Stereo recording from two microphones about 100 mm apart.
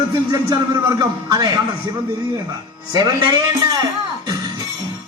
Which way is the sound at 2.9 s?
45° right (ahead or behind).